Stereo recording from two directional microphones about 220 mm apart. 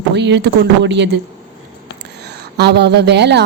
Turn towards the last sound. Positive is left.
turn(degrees=-50)  # may be behind; listen again after turning